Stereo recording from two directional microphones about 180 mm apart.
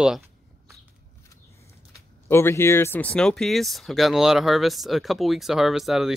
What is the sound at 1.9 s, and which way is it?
Speech, 15° left (ahead or behind).